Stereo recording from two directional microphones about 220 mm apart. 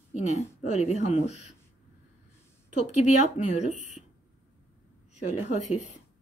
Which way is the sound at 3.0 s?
30° left (ahead or behind).